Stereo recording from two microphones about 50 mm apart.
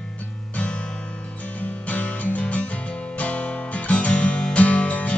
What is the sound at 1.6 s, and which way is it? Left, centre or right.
Music, left.